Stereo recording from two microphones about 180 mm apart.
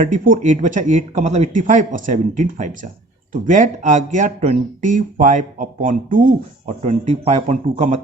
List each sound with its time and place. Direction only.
0.0 s speech: 45° right (ahead or behind)